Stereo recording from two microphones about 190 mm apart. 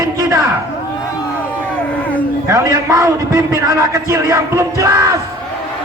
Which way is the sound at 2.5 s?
15° right (ahead or behind).